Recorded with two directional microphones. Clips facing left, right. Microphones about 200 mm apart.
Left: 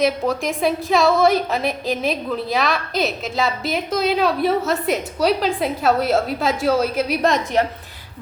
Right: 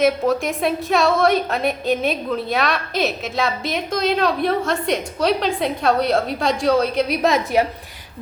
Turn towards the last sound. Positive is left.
turn(degrees=-5)  # may be behind; listen again after turning